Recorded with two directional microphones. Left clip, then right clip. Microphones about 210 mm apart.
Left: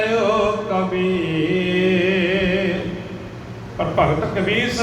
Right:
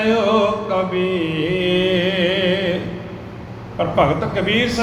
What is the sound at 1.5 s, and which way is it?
Music, 35° right (ahead or behind).